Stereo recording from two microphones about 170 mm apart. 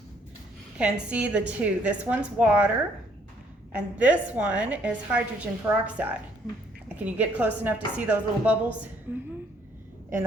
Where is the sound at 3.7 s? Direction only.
10° right (ahead or behind).